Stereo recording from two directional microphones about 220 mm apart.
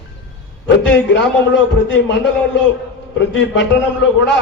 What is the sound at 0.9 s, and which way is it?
A man's voice, 55° left (ahead or behind).